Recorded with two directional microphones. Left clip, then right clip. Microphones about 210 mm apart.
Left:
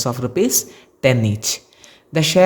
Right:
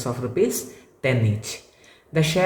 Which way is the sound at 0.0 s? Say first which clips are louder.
Left 3 dB; 50° left (ahead or behind).